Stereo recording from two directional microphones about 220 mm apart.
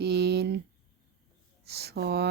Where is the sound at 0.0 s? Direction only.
50° right (ahead or behind).